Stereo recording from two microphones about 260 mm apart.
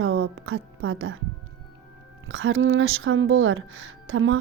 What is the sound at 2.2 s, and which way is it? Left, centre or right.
Speech, right.